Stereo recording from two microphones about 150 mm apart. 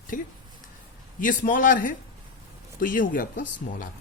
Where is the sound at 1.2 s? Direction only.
65° left (ahead or behind).